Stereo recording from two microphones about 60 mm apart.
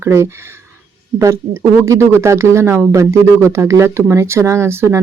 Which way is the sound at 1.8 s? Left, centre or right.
Right.